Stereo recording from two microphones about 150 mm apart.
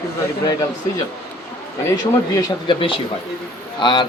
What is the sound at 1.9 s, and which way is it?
Speech, 25° left (ahead or behind).